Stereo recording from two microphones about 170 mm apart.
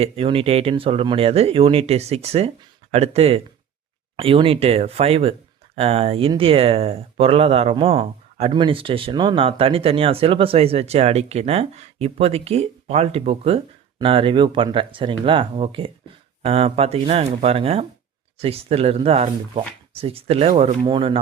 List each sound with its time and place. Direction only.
0.0 s speech: 35° right (ahead or behind)